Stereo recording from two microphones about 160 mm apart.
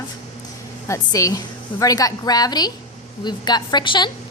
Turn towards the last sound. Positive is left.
turn(degrees=30)  # may be behind; listen again after turning